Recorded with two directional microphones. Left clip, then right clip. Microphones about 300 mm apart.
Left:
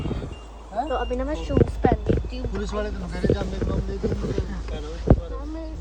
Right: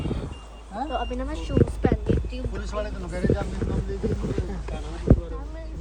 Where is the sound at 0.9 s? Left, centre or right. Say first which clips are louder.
Left 3 dB; centre.